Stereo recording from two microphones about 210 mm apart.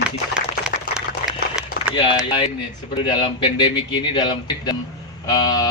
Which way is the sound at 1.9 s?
25° left (ahead or behind).